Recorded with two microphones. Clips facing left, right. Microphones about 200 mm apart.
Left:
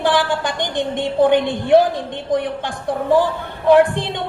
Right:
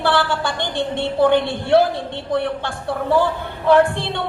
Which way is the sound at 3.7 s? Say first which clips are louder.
Left 2 dB; 15° left (ahead or behind).